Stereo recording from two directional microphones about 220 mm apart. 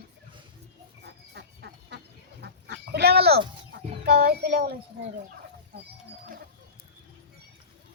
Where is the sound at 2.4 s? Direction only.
50° right (ahead or behind).